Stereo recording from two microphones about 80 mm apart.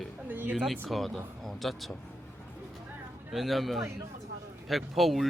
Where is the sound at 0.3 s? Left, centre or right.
Right.